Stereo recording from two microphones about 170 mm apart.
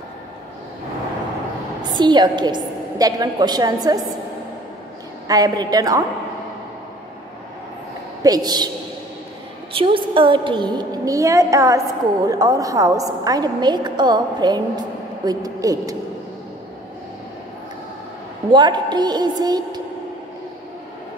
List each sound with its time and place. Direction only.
2.0 s a woman's voice: 25° right (ahead or behind)
5.3 s a woman's voice: 25° right (ahead or behind)
8.2 s a woman's voice: 20° right (ahead or behind)
9.8 s a woman's voice: 30° right (ahead or behind)
18.5 s a woman's voice: 25° right (ahead or behind)